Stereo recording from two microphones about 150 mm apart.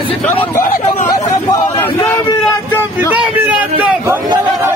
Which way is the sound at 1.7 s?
15° left (ahead or behind).